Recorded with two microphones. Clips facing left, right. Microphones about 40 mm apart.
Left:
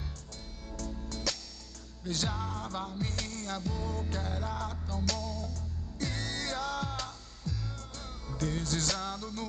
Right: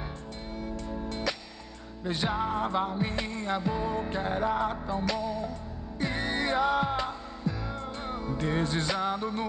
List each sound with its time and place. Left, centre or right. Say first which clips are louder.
0.7 s music: right 1 dB; right